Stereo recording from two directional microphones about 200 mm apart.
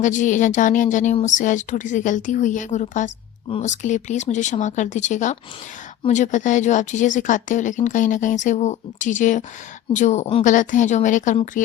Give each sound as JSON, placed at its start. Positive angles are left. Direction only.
{"t": 0.0, "sound": "speech", "side_deg": 40}